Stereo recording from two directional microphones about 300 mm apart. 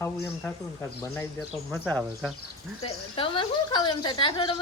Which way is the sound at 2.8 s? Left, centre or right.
Centre.